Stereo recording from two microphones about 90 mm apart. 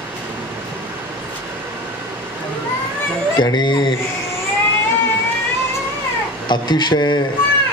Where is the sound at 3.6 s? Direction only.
60° left (ahead or behind).